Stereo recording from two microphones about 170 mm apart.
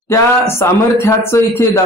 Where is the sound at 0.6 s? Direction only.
15° left (ahead or behind).